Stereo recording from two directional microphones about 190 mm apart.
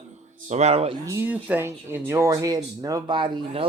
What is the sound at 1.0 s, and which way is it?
Speech, 15° right (ahead or behind).